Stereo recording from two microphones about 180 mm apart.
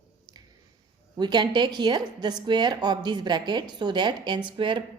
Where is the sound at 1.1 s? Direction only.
25° right (ahead or behind).